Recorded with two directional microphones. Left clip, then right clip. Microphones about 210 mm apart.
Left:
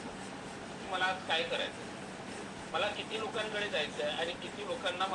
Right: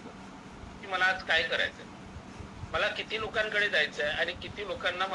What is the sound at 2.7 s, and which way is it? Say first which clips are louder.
Speech: right 4 dB; 40° right (ahead or behind).